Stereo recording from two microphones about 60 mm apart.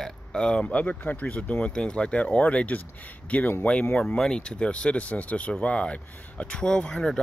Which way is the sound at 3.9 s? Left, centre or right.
Centre.